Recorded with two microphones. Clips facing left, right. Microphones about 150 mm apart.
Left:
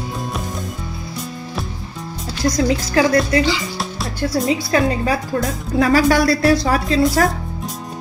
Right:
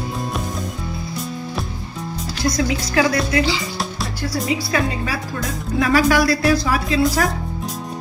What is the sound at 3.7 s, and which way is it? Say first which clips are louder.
Music: left 2 dB; centre (ahead or behind).